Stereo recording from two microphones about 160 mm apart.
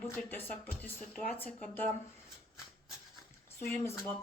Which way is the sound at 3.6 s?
15° left (ahead or behind).